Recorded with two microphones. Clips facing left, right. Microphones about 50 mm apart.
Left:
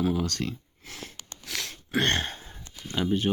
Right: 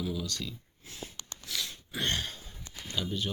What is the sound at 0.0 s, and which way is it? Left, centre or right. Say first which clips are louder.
Speech: left 8 dB; left.